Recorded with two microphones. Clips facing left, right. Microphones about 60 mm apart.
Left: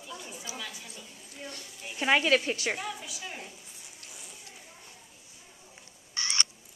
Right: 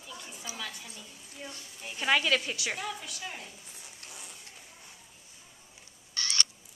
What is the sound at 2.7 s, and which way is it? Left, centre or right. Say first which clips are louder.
Speech: left 2 dB; centre.